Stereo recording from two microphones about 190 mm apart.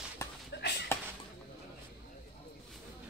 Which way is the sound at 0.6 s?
60° left (ahead or behind).